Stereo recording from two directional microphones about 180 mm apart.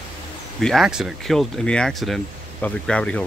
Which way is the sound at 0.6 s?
Centre (ahead or behind).